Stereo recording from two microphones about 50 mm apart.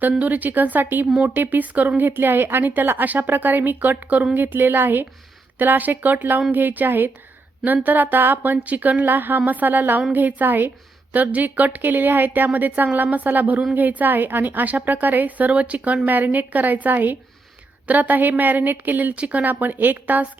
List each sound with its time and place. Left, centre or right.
0.2 s a woman's voice: right
2.0 s a woman's voice: right
19.1 s a woman's voice: right